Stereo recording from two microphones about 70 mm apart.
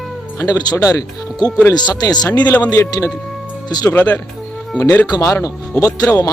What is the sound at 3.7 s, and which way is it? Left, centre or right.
Speech, left.